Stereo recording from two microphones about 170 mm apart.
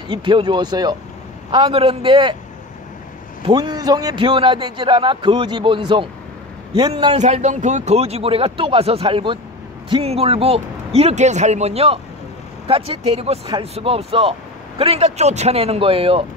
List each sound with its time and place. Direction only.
0.1 s a man's voice: 30° right (ahead or behind)
3.4 s a man's voice: 25° right (ahead or behind)
7.2 s speech: 40° right (ahead or behind)